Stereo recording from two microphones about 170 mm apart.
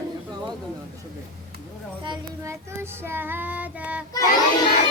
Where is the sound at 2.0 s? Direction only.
25° right (ahead or behind).